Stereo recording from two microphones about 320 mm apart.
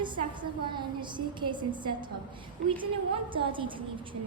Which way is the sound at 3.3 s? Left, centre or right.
Centre.